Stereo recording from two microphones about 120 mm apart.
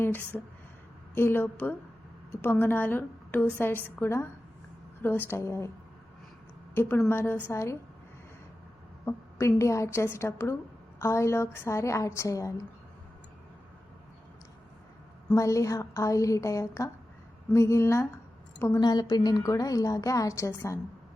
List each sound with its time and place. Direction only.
0.0 s a woman's voice: 20° left (ahead or behind)
5.3 s a woman's voice: 20° left (ahead or behind)
6.7 s a woman's voice: 20° left (ahead or behind)
9.0 s a woman's voice: 25° left (ahead or behind)
15.4 s a woman's voice: 25° left (ahead or behind)
18.8 s a woman's voice: 35° left (ahead or behind)